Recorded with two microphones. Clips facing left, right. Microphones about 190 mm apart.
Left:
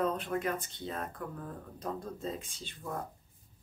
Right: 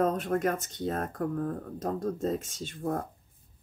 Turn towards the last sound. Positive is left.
turn(degrees=-50)  # may be behind; listen again after turning